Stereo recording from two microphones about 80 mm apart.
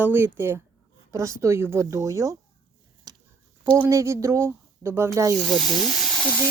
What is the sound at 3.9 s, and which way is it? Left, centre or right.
Speech, right.